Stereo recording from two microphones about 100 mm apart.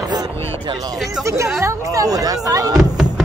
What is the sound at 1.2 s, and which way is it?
Speech, 30° right (ahead or behind).